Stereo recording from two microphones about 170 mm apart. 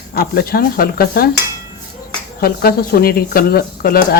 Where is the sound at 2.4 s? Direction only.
65° left (ahead or behind).